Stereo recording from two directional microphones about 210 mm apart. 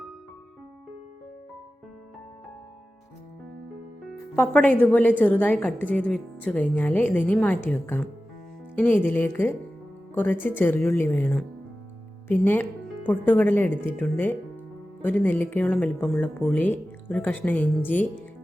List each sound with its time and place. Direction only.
4.4 s speech: 5° left (ahead or behind)